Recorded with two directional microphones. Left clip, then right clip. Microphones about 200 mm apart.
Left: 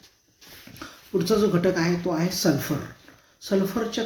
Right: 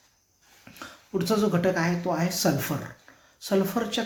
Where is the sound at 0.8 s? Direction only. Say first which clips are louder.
Left 4 dB; 5° right (ahead or behind).